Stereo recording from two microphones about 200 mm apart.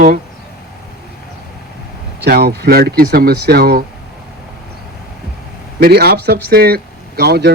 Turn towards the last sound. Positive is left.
turn(degrees=-55)  # may be behind; listen again after turning